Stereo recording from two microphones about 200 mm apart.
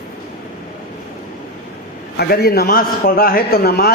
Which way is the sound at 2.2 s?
50° left (ahead or behind).